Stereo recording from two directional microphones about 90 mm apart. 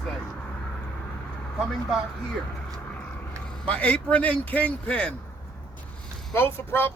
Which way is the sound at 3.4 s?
15° left (ahead or behind).